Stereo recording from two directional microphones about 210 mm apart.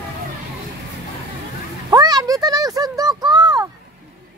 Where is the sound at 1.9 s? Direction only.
20° right (ahead or behind).